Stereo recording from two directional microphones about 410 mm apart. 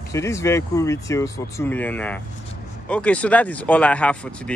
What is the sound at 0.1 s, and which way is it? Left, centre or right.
Speech, centre.